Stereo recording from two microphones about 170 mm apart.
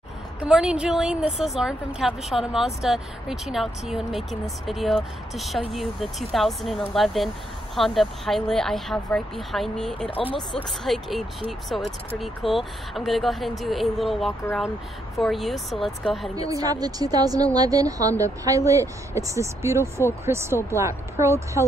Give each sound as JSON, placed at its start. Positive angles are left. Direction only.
{"t": 0.4, "sound": "a woman's voice", "side_deg": -5}
{"t": 16.4, "sound": "speech", "side_deg": -20}